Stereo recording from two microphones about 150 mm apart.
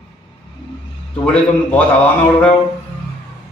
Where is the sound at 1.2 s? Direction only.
10° left (ahead or behind).